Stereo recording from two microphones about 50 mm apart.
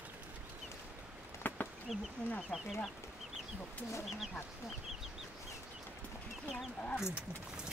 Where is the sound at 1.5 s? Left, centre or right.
Left.